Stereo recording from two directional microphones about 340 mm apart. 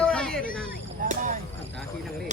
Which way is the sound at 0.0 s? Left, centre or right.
Centre.